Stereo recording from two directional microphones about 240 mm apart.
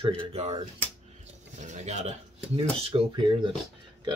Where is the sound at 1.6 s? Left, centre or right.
Right.